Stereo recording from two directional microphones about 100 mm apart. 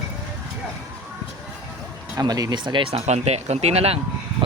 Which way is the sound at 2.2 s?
40° right (ahead or behind).